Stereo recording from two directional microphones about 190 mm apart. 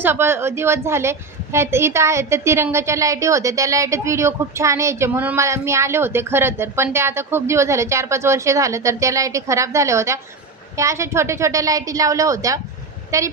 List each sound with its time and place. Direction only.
0.0 s a woman's voice: 10° right (ahead or behind)